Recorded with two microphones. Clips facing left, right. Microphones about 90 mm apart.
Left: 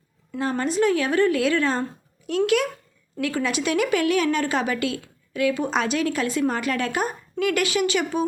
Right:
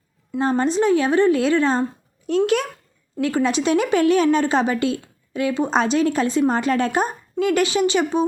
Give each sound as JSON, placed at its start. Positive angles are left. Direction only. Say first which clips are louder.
{"t": 0.3, "sound": "a woman's voice", "louder": "right 4 dB", "side_deg": -30}